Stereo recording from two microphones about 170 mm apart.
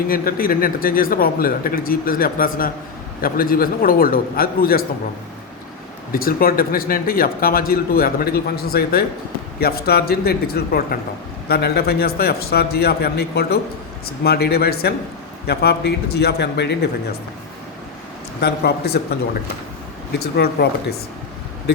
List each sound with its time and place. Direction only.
0.1 s speech: 60° left (ahead or behind)
6.1 s a man's voice: 60° left (ahead or behind); by 16.9 s 90° left
18.3 s a man's voice: 75° left (ahead or behind)